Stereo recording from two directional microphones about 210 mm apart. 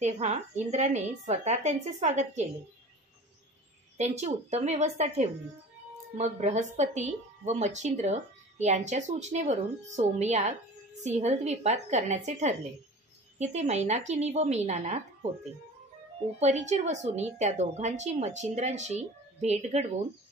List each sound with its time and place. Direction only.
0.0 s speech: 35° right (ahead or behind)
4.0 s speech: 30° right (ahead or behind)
16.3 s speech: 35° right (ahead or behind)